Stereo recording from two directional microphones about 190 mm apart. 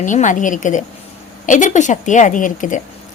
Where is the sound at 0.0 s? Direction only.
40° left (ahead or behind).